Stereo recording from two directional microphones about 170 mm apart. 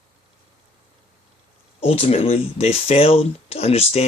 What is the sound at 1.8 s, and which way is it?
Speech, 35° left (ahead or behind).